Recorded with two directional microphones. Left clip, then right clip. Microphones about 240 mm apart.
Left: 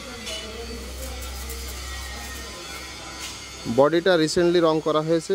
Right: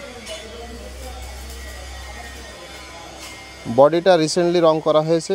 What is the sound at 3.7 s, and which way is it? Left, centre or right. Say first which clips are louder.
Speech: right 5 dB; centre.